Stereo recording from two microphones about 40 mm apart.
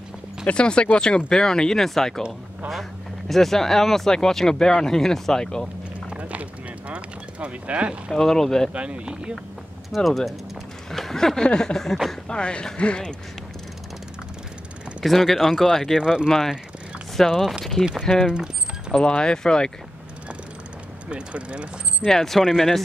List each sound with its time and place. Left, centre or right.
0.5 s speech: left
6.0 s a sound: right
8.1 s speech: centre
8.7 s speech: right
9.8 s speech: centre
10.9 s a sound: centre
11.4 s speech: centre
12.3 s speech: left
15.0 s speech: centre
18.1 s speech: centre
21.1 s speech: right
22.0 s speech: centre